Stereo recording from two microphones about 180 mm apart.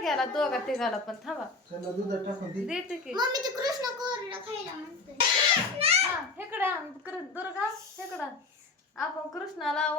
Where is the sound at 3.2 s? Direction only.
20° right (ahead or behind).